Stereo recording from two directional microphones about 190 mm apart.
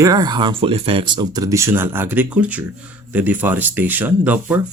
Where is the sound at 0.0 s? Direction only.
20° right (ahead or behind).